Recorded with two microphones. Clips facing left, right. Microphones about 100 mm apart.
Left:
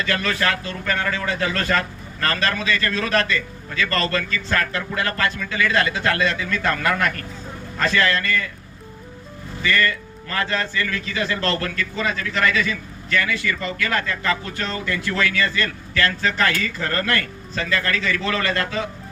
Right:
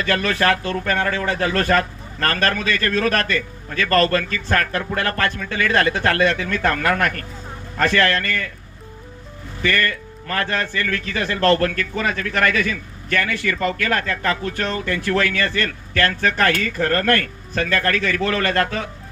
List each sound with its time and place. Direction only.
0.0 s a man's voice: 50° right (ahead or behind)
9.6 s a man's voice: 50° right (ahead or behind)